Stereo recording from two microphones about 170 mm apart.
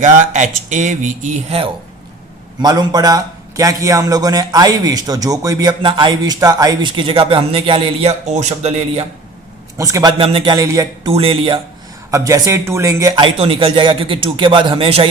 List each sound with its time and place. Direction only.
0.0 s speech: 45° right (ahead or behind)
2.6 s a man's voice: 25° right (ahead or behind); by 9.0 s 40° right (ahead or behind)
9.7 s a man's voice: 20° right (ahead or behind)
11.1 s a man's voice: 35° right (ahead or behind)
12.1 s a man's voice: 20° right (ahead or behind)
13.2 s a man's voice: 30° right (ahead or behind)